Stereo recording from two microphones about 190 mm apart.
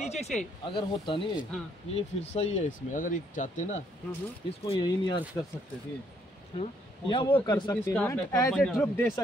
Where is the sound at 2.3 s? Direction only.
35° left (ahead or behind).